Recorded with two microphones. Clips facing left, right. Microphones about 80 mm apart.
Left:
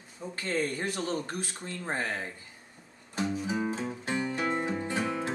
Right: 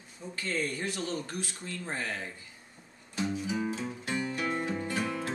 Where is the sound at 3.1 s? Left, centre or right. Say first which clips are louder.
Left 1 dB; left.